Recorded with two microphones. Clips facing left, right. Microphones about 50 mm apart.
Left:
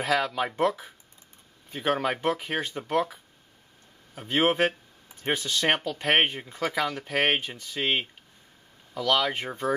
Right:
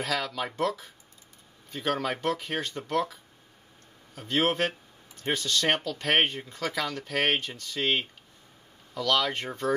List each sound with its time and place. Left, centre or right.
0.0 s speech: centre